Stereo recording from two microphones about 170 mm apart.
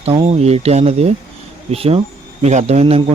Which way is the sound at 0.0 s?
30° right (ahead or behind).